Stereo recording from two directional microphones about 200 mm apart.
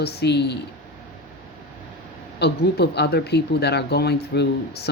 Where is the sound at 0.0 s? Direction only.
55° left (ahead or behind).